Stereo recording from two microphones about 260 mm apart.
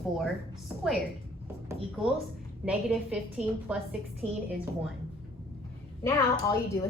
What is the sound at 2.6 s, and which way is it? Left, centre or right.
A woman's voice, centre.